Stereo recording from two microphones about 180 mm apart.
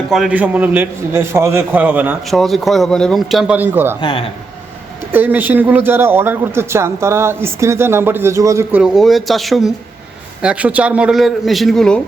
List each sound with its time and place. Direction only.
0.1 s a man's voice: 5° right (ahead or behind)
4.0 s speech: 30° left (ahead or behind)
5.1 s a man's voice: 10° right (ahead or behind)
8.8 s a man's voice: centre (ahead or behind)